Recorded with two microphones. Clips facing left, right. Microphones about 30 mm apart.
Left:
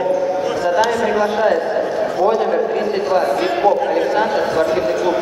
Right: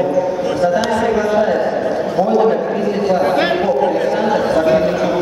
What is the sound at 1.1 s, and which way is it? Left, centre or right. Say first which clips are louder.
Speech: right 1 dB; left.